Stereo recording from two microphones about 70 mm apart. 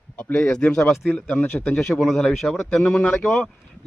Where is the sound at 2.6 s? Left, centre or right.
Centre.